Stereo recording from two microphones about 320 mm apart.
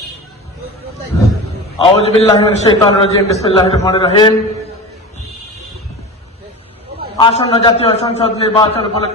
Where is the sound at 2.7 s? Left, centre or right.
Centre.